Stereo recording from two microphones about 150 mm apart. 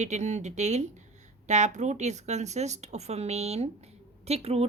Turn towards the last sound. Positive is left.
turn(degrees=-45)  # may be behind; listen again after turning